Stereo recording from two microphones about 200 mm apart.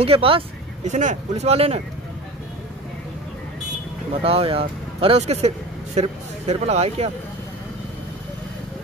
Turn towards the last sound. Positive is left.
turn(degrees=-30)  # may be behind; listen again after turning